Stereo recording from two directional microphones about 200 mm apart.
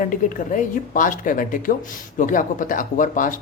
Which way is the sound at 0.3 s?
40° left (ahead or behind).